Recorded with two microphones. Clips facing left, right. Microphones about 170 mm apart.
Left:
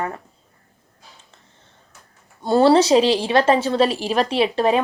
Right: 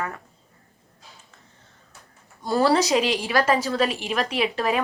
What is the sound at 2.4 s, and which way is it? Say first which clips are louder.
A woman's voice: left 6 dB; 25° left (ahead or behind).